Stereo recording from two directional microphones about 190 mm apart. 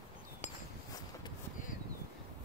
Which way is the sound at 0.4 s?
35° left (ahead or behind).